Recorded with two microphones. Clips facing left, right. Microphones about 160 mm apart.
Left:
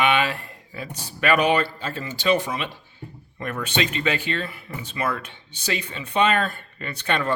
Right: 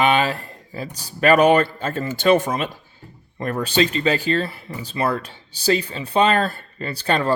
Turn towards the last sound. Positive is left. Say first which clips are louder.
# right 4 dB
turn(degrees=-35)  # may be behind; listen again after turning